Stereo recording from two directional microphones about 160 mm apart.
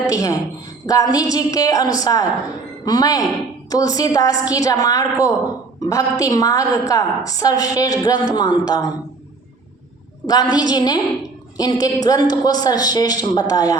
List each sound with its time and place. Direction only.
0.0 s a woman's voice: 20° left (ahead or behind)
10.2 s a woman's voice: 25° left (ahead or behind)